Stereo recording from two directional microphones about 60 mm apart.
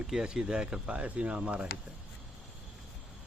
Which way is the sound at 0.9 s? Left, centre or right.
Right.